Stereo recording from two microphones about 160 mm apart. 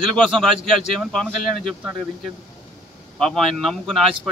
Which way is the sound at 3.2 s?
Centre (ahead or behind).